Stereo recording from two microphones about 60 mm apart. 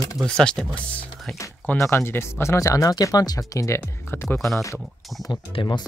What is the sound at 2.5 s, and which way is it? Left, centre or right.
Speech, left.